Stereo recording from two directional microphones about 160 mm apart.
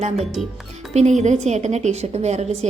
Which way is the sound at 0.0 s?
45° right (ahead or behind).